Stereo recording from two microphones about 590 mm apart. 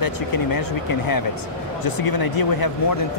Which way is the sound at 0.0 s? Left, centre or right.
Left.